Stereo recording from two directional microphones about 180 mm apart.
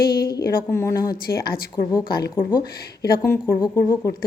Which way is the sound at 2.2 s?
20° left (ahead or behind).